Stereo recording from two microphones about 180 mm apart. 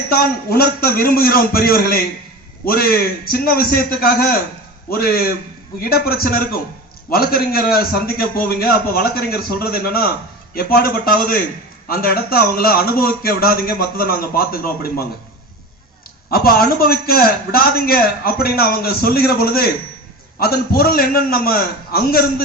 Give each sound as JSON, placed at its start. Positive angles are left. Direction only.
{"t": 0.1, "sound": "a man's voice", "side_deg": 55}
{"t": 16.3, "sound": "a man's voice", "side_deg": 55}